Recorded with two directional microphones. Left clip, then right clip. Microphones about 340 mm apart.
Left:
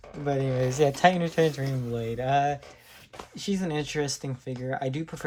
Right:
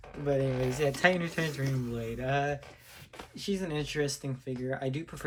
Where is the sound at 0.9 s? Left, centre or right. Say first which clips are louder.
Left 5 dB; centre.